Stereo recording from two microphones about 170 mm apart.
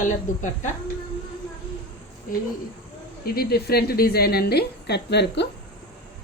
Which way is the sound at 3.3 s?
65° left (ahead or behind).